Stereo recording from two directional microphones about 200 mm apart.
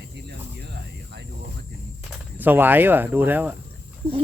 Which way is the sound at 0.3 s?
55° right (ahead or behind).